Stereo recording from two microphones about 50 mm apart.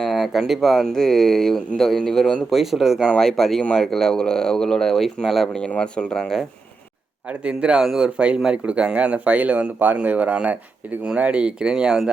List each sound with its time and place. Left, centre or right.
0.0 s speech: centre
2.5 s speech: centre
3.2 s speech: centre
5.5 s speech: left
7.4 s speech: centre